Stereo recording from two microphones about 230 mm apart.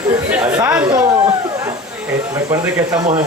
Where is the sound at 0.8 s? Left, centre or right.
Centre.